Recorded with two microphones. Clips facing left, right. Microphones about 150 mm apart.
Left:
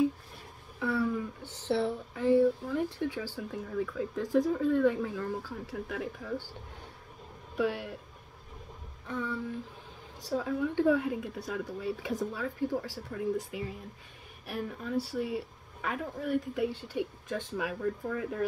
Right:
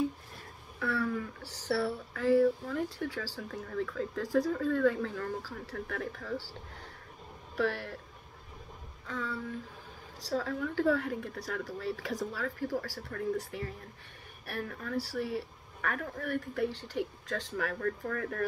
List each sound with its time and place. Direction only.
0.7 s speech: 20° left (ahead or behind)
7.5 s speech: 20° left (ahead or behind)
9.0 s a sound: 20° left (ahead or behind)
10.3 s speech: 15° left (ahead or behind)